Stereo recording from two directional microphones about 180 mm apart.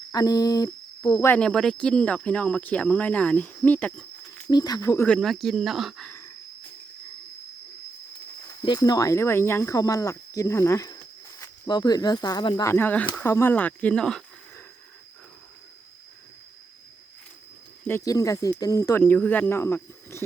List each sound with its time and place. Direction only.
0.1 s a sound: 20° left (ahead or behind)
1.3 s speech: 5° left (ahead or behind)
4.4 s speech: 20° left (ahead or behind)
5.0 s speech: 5° left (ahead or behind)
8.4 s speech: 20° left (ahead or behind); by 14.6 s 5° left (ahead or behind)
17.8 s speech: 15° left (ahead or behind)